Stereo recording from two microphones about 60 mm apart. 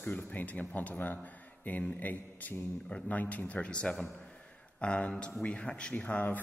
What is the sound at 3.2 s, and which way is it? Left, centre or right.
A man's voice, left.